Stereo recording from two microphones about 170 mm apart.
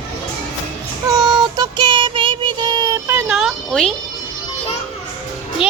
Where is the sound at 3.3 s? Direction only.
Centre (ahead or behind).